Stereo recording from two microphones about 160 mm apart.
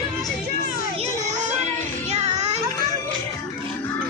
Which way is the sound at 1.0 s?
45° right (ahead or behind).